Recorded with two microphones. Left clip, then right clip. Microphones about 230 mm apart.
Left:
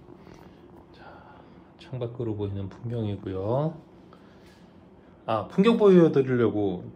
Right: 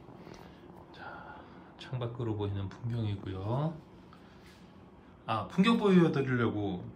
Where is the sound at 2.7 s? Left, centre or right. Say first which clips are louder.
Left 8 dB; centre.